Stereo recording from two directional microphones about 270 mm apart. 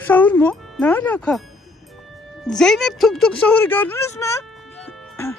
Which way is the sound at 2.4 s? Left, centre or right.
Centre.